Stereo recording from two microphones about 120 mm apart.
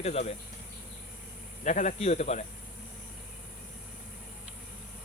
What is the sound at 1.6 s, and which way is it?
Speech, 90° left.